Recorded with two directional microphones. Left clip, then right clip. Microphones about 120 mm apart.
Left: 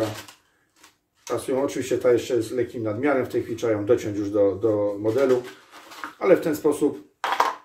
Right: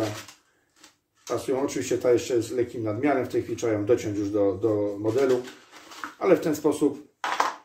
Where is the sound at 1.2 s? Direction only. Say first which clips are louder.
Left 2 dB; 25° right (ahead or behind).